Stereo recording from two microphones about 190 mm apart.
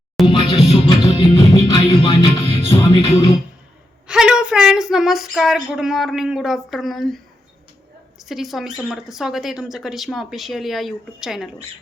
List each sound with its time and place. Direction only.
0.3 s music: 30° left (ahead or behind)
2.4 s music: 30° left (ahead or behind)
3.1 s music: 20° left (ahead or behind)
4.0 s speech: 5° right (ahead or behind)
8.2 s speech: centre (ahead or behind)